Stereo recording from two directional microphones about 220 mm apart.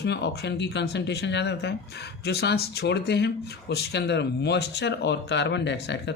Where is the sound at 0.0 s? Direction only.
50° left (ahead or behind).